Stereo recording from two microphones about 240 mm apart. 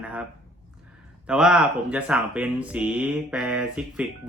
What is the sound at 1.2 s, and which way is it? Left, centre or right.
Speech, centre.